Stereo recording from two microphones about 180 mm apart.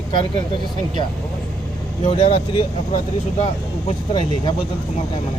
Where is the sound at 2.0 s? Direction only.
30° left (ahead or behind).